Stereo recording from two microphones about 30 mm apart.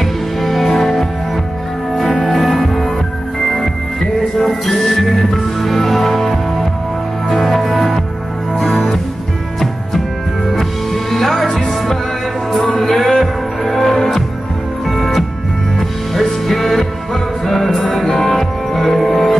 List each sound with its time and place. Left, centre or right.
0.0 s music: centre
10.5 s music: centre